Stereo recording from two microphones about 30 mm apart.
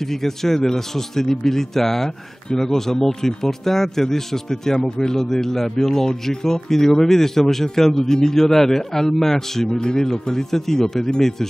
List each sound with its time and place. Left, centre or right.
0.1 s speech: centre
9.8 s speech: left
10.1 s speech: centre